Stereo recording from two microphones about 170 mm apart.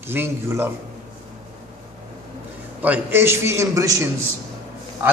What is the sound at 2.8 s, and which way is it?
A man's voice, 10° right (ahead or behind).